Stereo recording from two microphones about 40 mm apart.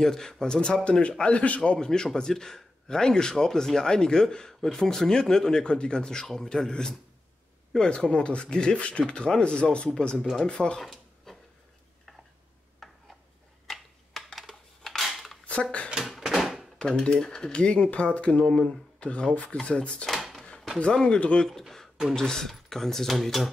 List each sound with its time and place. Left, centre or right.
0.0 s a man's voice: centre
1.3 s speech: left
1.6 s a man's voice: left
11.3 s a sound: centre
13.7 s a sound: centre
15.6 s speech: left
16.0 s a sound: centre
16.8 s speech: left
18.4 s a man's voice: centre
18.9 s speech: left
20.1 s drawer open or close: centre
20.8 s speech: centre
21.5 s a sound: centre
22.1 s a man's voice: centre